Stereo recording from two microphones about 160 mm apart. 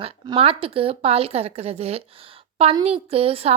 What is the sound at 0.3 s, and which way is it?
A woman's voice, 35° right (ahead or behind).